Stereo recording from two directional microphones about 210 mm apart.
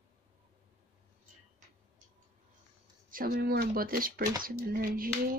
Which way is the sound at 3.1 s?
45° right (ahead or behind).